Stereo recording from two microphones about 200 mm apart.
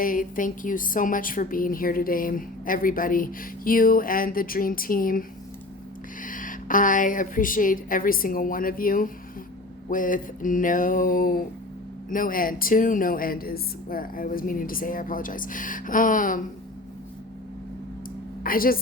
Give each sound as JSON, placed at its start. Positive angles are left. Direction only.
{"t": 0.0, "sound": "a woman's voice", "side_deg": 45}
{"t": 6.2, "sound": "a woman's voice", "side_deg": 40}
{"t": 9.9, "sound": "a sound", "side_deg": 40}
{"t": 12.1, "sound": "a woman's voice", "side_deg": 45}
{"t": 18.4, "sound": "a woman's voice", "side_deg": 45}